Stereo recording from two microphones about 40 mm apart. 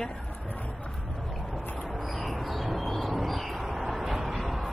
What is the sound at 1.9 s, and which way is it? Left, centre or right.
Bird, centre.